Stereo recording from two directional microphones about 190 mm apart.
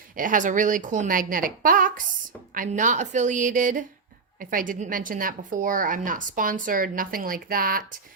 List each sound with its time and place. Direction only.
0.2 s a woman's voice: 45° right (ahead or behind)